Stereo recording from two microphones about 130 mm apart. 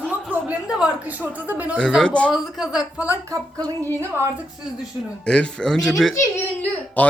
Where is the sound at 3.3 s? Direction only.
30° right (ahead or behind).